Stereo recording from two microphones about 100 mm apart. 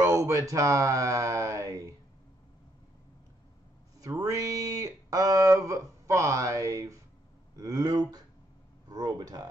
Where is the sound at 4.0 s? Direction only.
35° right (ahead or behind).